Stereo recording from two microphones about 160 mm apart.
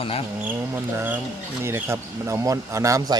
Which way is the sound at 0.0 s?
35° left (ahead or behind).